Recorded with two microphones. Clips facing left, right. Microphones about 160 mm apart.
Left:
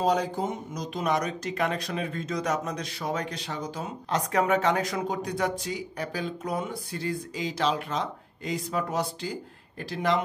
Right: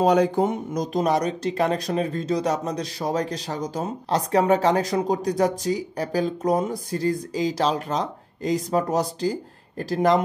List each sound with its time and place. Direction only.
0.0 s speech: 65° right (ahead or behind)
0.9 s speech: 35° right (ahead or behind)